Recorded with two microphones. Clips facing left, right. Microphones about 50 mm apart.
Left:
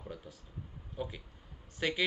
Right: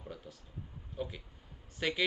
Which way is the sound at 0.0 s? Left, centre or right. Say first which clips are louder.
Left 1 dB; centre.